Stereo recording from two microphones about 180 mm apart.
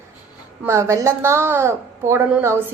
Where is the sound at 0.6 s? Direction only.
15° right (ahead or behind).